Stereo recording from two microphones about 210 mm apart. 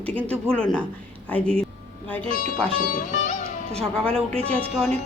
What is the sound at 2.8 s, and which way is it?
Speech, 40° left (ahead or behind).